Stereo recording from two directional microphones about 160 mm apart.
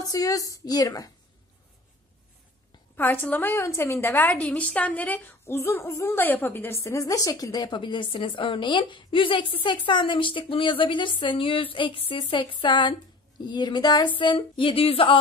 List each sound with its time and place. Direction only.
0.1 s a woman's voice: 20° left (ahead or behind)
3.0 s a woman's voice: 15° left (ahead or behind); by 15.1 s 35° left (ahead or behind)